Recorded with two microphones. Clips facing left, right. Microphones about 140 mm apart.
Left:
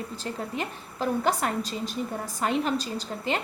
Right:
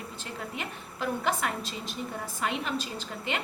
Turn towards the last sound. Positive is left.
turn(degrees=35)  # may be behind; listen again after turning